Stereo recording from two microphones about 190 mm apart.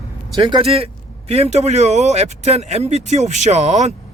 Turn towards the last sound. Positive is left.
turn(degrees=-35)  # may be behind; listen again after turning